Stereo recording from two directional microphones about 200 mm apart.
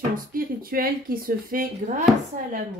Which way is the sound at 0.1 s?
45° right (ahead or behind).